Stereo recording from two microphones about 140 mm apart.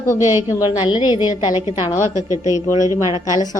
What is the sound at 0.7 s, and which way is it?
Speech, 35° left (ahead or behind).